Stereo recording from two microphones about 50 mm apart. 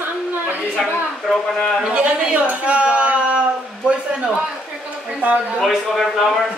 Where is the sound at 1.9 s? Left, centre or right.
Right.